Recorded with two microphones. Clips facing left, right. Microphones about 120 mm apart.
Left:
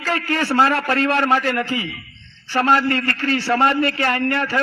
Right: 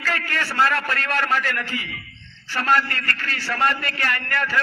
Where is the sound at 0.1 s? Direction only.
40° left (ahead or behind).